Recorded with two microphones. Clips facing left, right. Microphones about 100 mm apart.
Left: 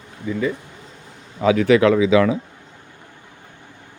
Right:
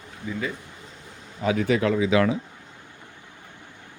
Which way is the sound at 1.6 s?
90° left.